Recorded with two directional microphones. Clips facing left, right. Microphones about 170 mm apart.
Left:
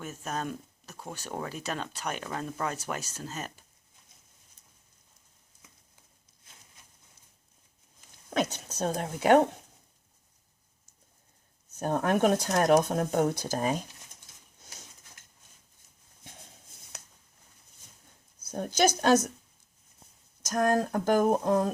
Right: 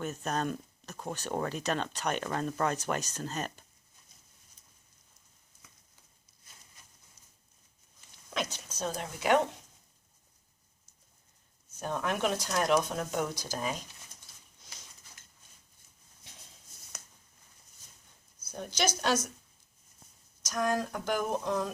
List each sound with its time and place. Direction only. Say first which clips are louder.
0.0 s speech: right 2 dB; 5° left (ahead or behind)
8.3 s speech: left 7 dB; 45° left (ahead or behind)
11.9 s speech: left 7 dB; 50° left (ahead or behind)
16.2 s a sound: left 6 dB; 50° left (ahead or behind)
18.5 s speech: left 7 dB; 50° left (ahead or behind)
20.5 s speech: left 5 dB; 50° left (ahead or behind)